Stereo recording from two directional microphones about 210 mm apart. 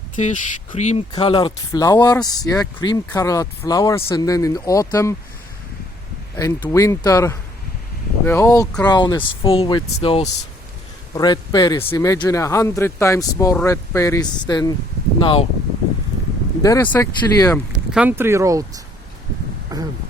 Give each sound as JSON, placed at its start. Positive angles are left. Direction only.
{"t": 0.2, "sound": "speech", "side_deg": 35}
{"t": 1.1, "sound": "speech", "side_deg": 20}
{"t": 6.3, "sound": "speech", "side_deg": 10}
{"t": 16.6, "sound": "speech", "side_deg": 10}
{"t": 17.9, "sound": "speech", "side_deg": -10}
{"t": 19.7, "sound": "a sound", "side_deg": -15}